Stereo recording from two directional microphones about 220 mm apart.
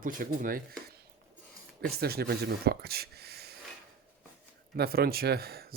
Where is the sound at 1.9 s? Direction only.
45° right (ahead or behind).